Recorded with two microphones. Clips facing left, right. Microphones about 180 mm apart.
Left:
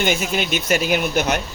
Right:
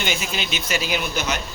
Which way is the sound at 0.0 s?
50° left (ahead or behind).